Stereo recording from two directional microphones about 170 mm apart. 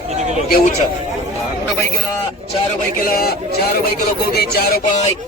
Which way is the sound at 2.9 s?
60° left (ahead or behind).